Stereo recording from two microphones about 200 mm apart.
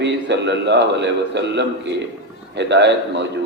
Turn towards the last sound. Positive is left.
turn(degrees=-60)  # may be behind; listen again after turning